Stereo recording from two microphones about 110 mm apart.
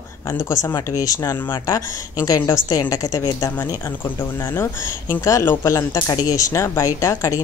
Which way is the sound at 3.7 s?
20° left (ahead or behind).